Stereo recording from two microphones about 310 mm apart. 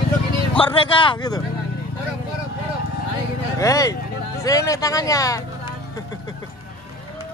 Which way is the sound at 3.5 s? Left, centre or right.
Centre.